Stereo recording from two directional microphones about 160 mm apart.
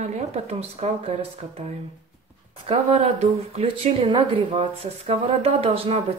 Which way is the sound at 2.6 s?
40° right (ahead or behind).